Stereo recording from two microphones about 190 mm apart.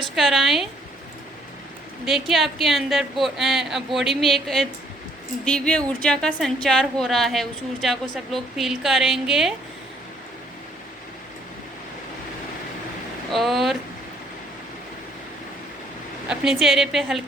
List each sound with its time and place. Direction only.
0.2 s a woman's voice: centre (ahead or behind)
2.0 s a woman's voice: centre (ahead or behind)
13.3 s a woman's voice: centre (ahead or behind)
16.3 s a woman's voice: 5° right (ahead or behind)